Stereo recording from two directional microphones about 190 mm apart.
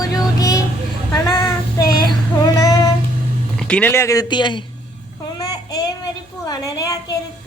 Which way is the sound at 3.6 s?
10° left (ahead or behind).